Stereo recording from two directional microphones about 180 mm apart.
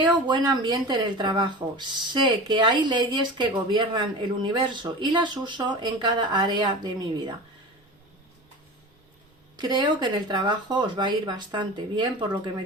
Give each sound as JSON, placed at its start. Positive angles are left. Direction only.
{"t": 0.3, "sound": "speech", "side_deg": -25}
{"t": 9.6, "sound": "speech", "side_deg": -25}